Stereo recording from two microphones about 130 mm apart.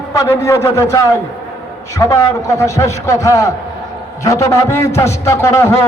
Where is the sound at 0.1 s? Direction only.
25° left (ahead or behind).